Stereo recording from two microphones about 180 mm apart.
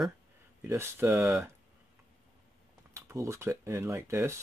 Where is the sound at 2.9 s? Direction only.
15° right (ahead or behind).